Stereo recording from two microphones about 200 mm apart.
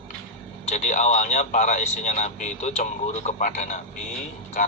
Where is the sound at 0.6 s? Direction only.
35° left (ahead or behind).